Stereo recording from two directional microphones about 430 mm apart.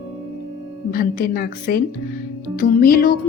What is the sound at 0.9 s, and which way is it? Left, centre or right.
A woman's voice, centre.